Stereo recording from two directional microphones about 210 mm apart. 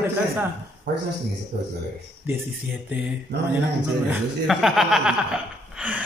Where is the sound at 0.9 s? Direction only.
55° right (ahead or behind).